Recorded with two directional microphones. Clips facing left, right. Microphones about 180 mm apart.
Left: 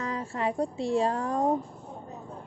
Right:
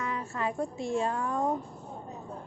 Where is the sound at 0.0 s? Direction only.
35° left (ahead or behind).